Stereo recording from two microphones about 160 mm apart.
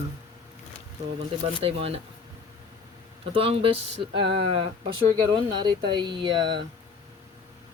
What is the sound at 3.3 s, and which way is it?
Speech, 35° right (ahead or behind).